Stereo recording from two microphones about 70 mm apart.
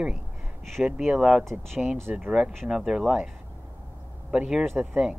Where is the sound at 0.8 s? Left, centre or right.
Centre.